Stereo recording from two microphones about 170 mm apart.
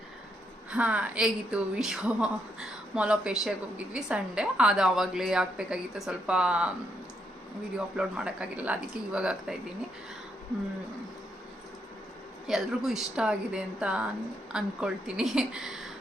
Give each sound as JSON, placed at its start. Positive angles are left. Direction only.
{"t": 0.7, "sound": "a woman's voice", "side_deg": -5}
{"t": 7.9, "sound": "a woman's voice", "side_deg": -5}
{"t": 12.5, "sound": "a woman's voice", "side_deg": 0}